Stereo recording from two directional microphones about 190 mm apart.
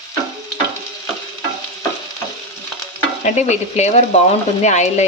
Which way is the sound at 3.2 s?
35° left (ahead or behind).